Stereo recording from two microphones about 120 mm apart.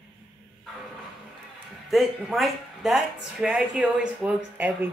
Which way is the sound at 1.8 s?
Centre (ahead or behind).